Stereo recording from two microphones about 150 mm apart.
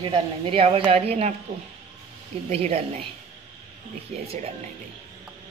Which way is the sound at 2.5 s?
45° right (ahead or behind).